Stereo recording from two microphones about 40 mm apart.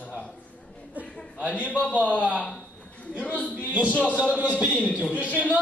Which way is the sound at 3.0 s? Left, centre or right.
Left.